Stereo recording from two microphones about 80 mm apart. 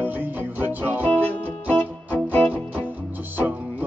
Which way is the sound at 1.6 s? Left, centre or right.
Centre.